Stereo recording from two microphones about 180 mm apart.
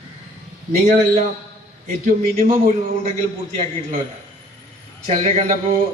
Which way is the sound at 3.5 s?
40° right (ahead or behind).